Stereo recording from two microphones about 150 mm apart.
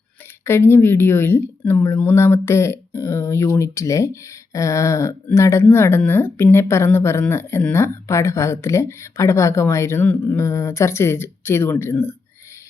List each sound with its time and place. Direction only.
0.4 s speech: 15° left (ahead or behind)